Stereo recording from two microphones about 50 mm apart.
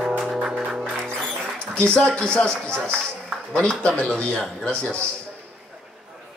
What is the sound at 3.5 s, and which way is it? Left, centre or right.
Speech, centre.